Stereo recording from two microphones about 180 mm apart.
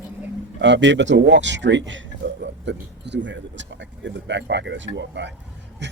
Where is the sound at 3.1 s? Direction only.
90° right.